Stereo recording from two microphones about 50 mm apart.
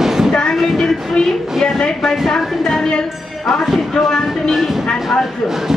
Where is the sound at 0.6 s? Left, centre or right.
Centre.